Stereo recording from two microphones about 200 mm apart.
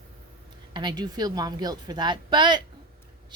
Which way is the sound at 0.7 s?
20° right (ahead or behind).